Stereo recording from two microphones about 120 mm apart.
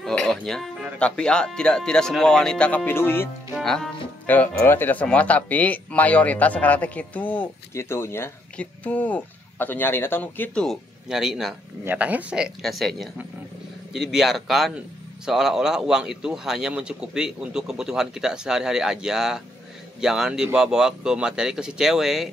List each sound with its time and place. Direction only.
0.0 s music: 5° left (ahead or behind)
0.5 s speech: centre (ahead or behind); by 3.3 s 20° left (ahead or behind)
3.6 s speech: 5° left (ahead or behind)
10.6 s speech: centre (ahead or behind)
11.8 s speech: 15° right (ahead or behind)